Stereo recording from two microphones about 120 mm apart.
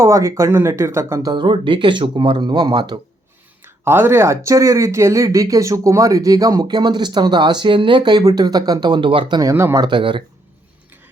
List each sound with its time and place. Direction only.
0.0 s speech: 25° right (ahead or behind)
1.3 s speech: 40° right (ahead or behind)
3.6 s speech: 20° right (ahead or behind); by 9.4 s 45° right (ahead or behind)
9.4 s speech: 25° right (ahead or behind)
9.8 s speech: 40° right (ahead or behind)